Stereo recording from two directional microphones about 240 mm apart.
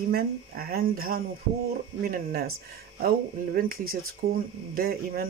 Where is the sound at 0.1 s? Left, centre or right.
Right.